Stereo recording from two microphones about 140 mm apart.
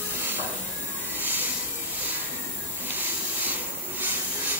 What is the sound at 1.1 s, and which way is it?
Music, 15° right (ahead or behind).